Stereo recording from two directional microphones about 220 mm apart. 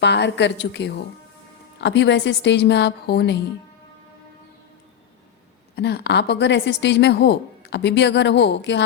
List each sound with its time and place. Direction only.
0.0 s a woman's voice: 50° left (ahead or behind)
5.7 s a woman's voice: 50° left (ahead or behind)